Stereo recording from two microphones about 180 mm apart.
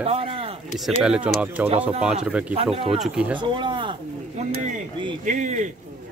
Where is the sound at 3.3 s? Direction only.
25° right (ahead or behind).